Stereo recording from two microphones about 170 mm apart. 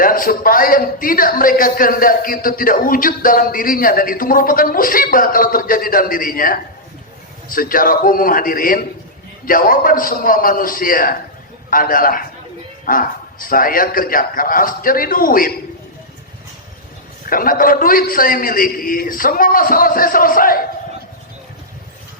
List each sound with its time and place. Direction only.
0.0 s a man's voice: 55° left (ahead or behind)
17.2 s a man's voice: 55° left (ahead or behind)